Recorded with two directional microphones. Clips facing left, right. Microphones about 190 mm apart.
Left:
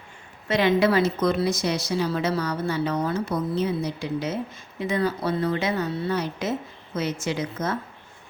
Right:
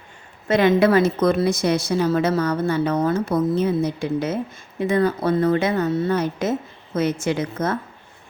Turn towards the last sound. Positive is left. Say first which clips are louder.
# right 4 dB
turn(degrees=-55)  # may be behind; listen again after turning